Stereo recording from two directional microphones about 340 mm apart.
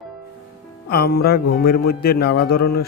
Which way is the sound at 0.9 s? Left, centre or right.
Left.